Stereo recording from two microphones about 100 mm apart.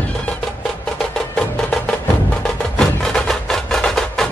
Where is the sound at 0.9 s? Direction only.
10° left (ahead or behind).